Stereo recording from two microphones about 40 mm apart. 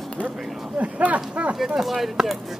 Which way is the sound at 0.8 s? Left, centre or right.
Right.